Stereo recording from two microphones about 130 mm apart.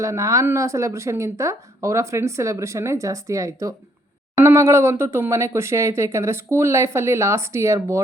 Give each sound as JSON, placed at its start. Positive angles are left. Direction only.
{"t": 0.0, "sound": "speech", "side_deg": -25}